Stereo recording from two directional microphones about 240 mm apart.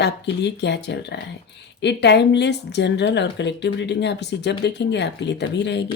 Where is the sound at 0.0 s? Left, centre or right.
Left.